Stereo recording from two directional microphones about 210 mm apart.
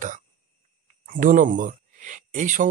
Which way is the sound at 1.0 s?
40° right (ahead or behind).